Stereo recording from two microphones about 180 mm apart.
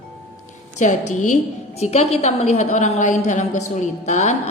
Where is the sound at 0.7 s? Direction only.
40° left (ahead or behind).